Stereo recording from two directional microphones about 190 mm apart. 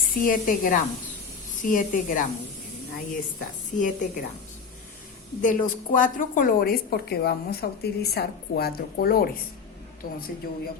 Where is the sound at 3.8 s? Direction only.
45° left (ahead or behind).